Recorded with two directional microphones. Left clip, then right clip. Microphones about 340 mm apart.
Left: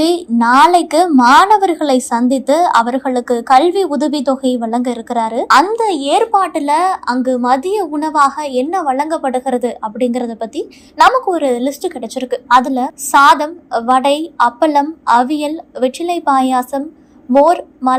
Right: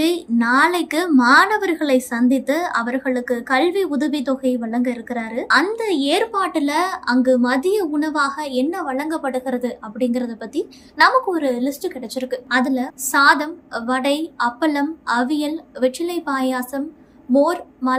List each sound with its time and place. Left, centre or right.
0.0 s a woman's voice: centre
1.1 s a woman's voice: centre
5.0 s a woman's voice: left
5.7 s a woman's voice: centre